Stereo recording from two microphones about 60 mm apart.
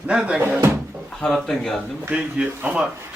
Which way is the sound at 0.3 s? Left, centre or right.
Right.